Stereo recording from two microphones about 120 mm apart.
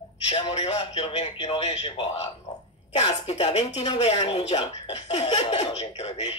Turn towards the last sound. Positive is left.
turn(degrees=65)  # may be behind; listen again after turning